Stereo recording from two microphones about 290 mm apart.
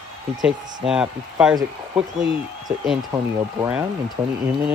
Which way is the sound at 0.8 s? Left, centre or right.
Centre.